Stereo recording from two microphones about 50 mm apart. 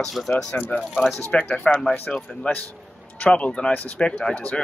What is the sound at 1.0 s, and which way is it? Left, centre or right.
Speech, left.